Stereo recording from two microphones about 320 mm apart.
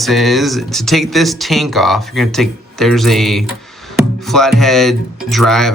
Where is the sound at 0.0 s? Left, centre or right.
Centre.